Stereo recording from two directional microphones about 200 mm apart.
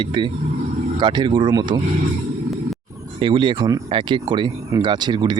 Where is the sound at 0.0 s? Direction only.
25° right (ahead or behind).